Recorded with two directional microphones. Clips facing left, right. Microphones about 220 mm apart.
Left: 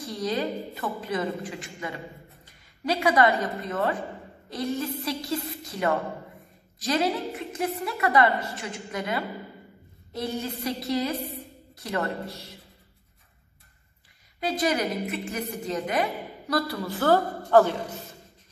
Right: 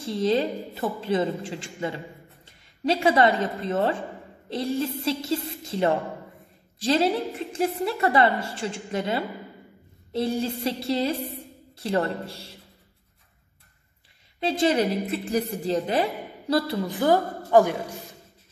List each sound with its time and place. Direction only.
0.0 s a woman's voice: 25° right (ahead or behind)
2.4 s a sound: 25° right (ahead or behind)
3.6 s a woman's voice: 30° right (ahead or behind)
14.4 s a woman's voice: 30° right (ahead or behind)